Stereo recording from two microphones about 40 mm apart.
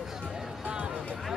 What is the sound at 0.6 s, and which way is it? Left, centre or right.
Music, right.